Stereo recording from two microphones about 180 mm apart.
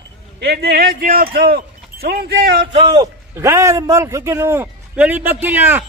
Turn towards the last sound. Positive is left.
turn(degrees=-10)  # may be behind; listen again after turning